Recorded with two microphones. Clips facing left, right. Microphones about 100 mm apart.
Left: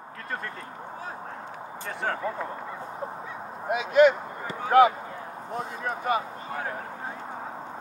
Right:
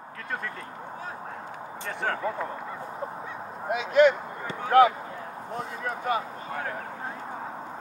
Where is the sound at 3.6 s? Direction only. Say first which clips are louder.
Left 1 dB; 15° left (ahead or behind).